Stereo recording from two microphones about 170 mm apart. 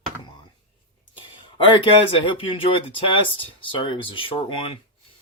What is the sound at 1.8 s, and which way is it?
Speech, 30° left (ahead or behind).